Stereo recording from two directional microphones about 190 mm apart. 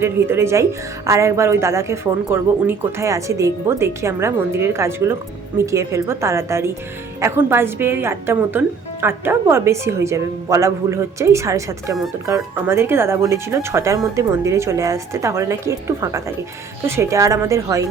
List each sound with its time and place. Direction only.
0.0 s a woman's voice: 10° right (ahead or behind)